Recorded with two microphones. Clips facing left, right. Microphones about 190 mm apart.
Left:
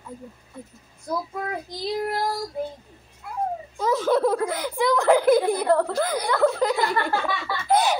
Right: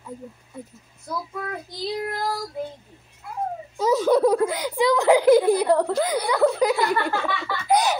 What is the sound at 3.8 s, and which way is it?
A child's voice, 15° right (ahead or behind).